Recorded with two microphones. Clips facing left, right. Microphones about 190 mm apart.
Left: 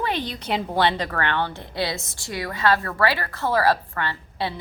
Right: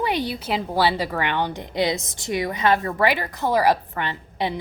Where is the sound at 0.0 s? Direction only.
10° right (ahead or behind).